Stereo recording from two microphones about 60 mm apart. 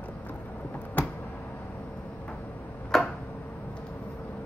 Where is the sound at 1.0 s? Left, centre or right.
Left.